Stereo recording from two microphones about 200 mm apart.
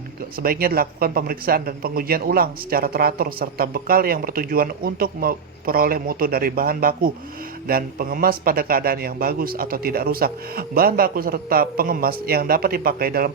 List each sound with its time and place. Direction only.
0.3 s speech: 45° right (ahead or behind)